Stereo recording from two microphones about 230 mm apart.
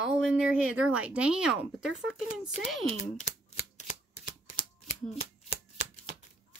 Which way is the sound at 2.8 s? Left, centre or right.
Left.